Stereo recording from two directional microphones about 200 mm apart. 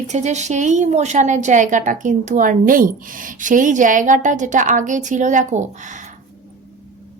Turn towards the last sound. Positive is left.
turn(degrees=-35)  # may be behind; listen again after turning